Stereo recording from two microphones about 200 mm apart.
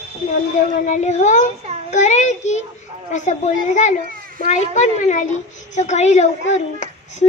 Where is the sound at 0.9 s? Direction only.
35° left (ahead or behind).